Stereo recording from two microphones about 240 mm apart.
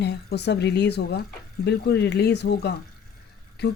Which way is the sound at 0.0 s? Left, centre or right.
Left.